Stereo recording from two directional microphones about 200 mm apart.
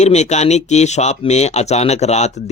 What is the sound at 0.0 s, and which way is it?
Speech, 35° left (ahead or behind).